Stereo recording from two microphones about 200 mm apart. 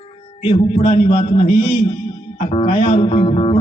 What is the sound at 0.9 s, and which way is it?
Speech, 30° left (ahead or behind).